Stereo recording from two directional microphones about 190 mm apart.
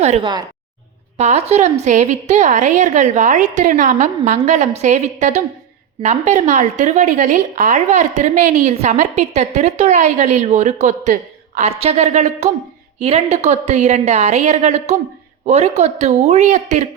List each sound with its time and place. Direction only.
0.0 s a woman's voice: 35° right (ahead or behind)